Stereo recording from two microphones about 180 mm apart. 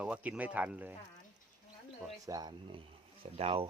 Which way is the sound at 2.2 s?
20° right (ahead or behind).